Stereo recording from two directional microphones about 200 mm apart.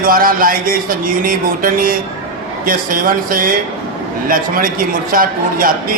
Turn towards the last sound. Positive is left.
turn(degrees=-45)  # may be behind; listen again after turning